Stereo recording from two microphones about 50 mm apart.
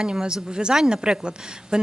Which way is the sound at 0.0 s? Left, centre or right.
Centre.